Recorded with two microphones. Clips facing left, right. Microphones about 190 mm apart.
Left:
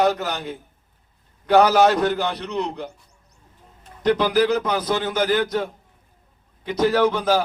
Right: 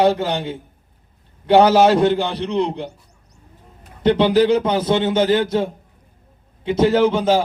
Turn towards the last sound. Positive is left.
turn(degrees=-25)  # may be behind; listen again after turning